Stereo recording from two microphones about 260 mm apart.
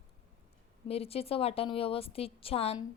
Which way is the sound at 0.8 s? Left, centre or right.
Left.